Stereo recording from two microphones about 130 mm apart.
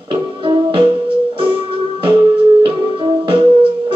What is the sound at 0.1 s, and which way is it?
Music, 40° right (ahead or behind).